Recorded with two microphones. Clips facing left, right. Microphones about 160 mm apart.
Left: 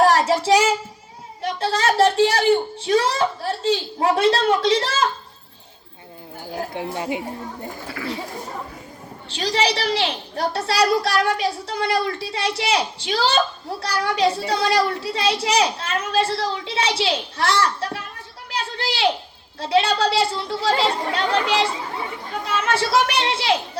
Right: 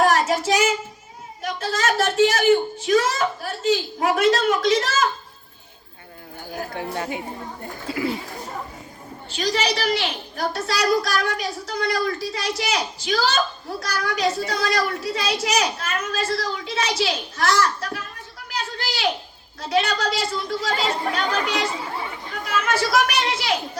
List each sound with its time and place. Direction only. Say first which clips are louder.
0.0 s a sound: left 2 dB; 30° left (ahead or behind)
1.4 s a child's voice: left 3 dB; 30° left (ahead or behind)
6.5 s a child's voice: left 2 dB; 30° left (ahead or behind)
6.9 s a woman's voice: left 2 dB; 15° left (ahead or behind)
7.9 s speech: right 7 dB; 25° right (ahead or behind)
9.3 s a child's voice: left 2 dB; 30° left (ahead or behind)
18.4 s a sound: left 3 dB; 30° left (ahead or behind)
19.5 s a child's voice: left 3 dB; 30° left (ahead or behind)